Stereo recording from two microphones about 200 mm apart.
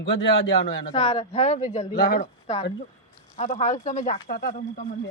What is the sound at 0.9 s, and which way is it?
A woman's voice, 30° left (ahead or behind).